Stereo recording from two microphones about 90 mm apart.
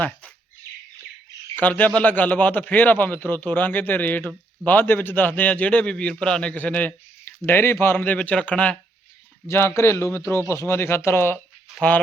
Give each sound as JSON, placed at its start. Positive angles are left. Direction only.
{"t": 1.5, "sound": "a man's voice", "side_deg": 20}
{"t": 9.5, "sound": "a man's voice", "side_deg": 30}